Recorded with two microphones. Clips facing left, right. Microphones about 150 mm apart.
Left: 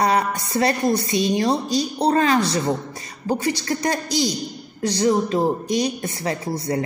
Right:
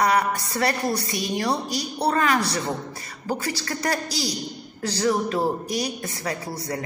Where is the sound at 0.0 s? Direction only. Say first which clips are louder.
Left 1 dB; 25° left (ahead or behind).